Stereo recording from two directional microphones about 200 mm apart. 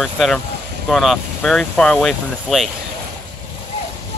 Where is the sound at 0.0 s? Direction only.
Centre (ahead or behind).